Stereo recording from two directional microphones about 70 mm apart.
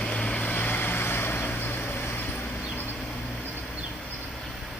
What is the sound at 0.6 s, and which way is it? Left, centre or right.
Vehicle, left.